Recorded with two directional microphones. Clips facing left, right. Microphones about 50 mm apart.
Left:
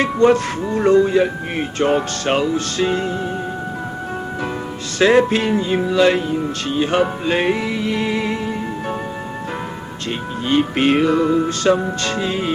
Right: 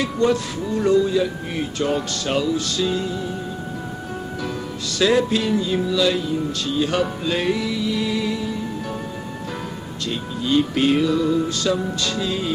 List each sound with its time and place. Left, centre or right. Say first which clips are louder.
0.0 s music: left 6 dB; left
4.9 s music: left 5 dB; left
10.4 s music: left 2 dB; left